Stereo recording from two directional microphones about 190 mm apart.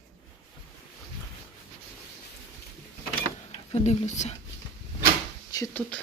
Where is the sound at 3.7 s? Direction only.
35° left (ahead or behind).